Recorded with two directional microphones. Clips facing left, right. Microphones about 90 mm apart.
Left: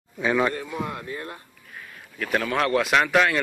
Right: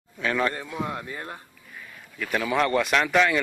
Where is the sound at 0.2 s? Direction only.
15° left (ahead or behind).